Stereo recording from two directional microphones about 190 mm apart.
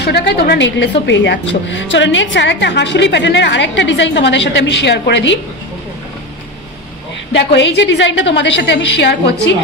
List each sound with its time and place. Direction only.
0.0 s a woman's voice: 60° left (ahead or behind)
7.3 s a woman's voice: 65° left (ahead or behind)